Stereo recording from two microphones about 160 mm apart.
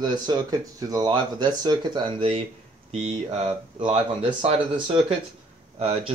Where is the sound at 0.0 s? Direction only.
25° right (ahead or behind).